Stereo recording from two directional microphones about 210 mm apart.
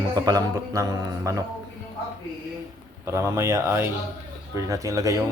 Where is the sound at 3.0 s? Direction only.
15° right (ahead or behind).